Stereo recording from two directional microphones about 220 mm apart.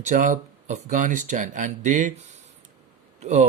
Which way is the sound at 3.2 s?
30° right (ahead or behind).